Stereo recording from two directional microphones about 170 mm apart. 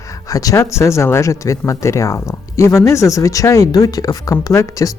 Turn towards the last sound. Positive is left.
turn(degrees=20)  # may be behind; listen again after turning